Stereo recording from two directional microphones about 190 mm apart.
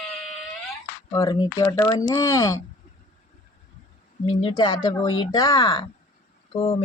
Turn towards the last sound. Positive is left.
turn(degrees=30)  # may be behind; listen again after turning